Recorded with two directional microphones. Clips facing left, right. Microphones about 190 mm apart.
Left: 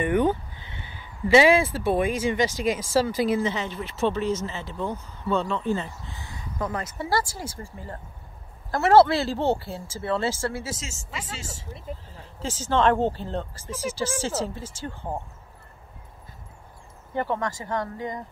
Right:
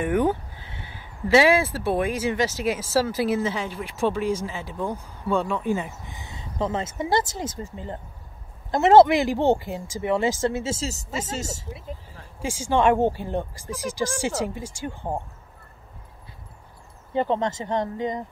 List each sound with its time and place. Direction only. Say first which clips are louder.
0.0 s speech: even; 5° right (ahead or behind); by 11.6 s 40° right (ahead or behind)
12.4 s speech: right 1 dB; 10° right (ahead or behind)
17.1 s speech: right 4 dB; 20° right (ahead or behind)